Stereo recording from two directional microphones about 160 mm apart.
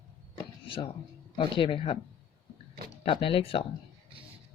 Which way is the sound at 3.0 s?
35° left (ahead or behind).